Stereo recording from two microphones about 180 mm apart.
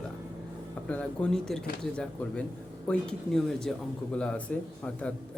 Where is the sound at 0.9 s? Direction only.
5° left (ahead or behind).